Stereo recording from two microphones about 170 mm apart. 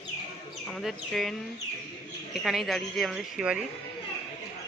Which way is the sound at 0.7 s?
Centre (ahead or behind).